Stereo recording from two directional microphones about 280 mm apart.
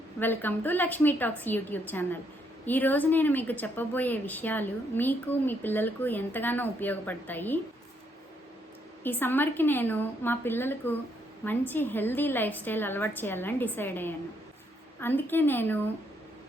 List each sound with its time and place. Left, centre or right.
0.2 s a woman's voice: centre
9.0 s a woman's voice: centre